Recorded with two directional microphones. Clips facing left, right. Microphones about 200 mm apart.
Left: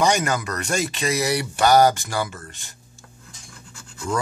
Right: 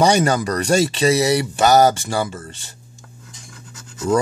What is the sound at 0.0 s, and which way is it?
Speech, 35° right (ahead or behind).